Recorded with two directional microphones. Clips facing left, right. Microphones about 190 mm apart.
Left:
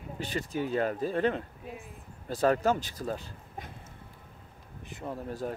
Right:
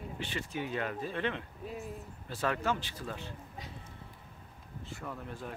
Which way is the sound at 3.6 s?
55° left (ahead or behind).